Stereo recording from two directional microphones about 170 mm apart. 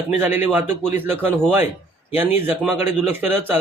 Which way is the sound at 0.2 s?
10° right (ahead or behind).